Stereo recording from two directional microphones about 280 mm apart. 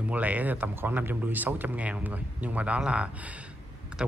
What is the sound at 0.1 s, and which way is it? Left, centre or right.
Speech, centre.